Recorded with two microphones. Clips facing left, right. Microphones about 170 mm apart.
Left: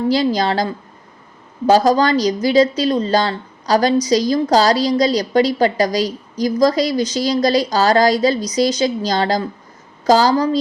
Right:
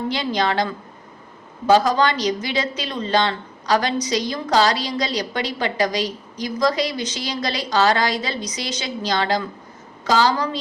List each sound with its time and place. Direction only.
0.1 s a woman's voice: 35° left (ahead or behind)